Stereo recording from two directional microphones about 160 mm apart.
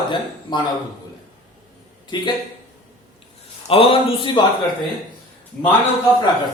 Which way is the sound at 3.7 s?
35° left (ahead or behind).